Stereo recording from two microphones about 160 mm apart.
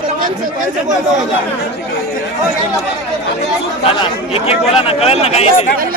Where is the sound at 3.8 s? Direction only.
35° left (ahead or behind).